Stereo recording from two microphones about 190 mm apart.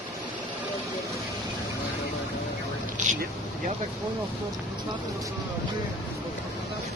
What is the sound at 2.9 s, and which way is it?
Vehicle, 40° right (ahead or behind).